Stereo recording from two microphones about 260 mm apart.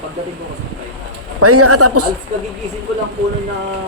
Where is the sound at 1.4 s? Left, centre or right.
Right.